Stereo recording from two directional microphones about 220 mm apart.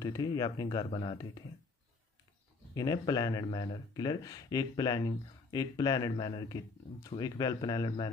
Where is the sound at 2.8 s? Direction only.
15° left (ahead or behind).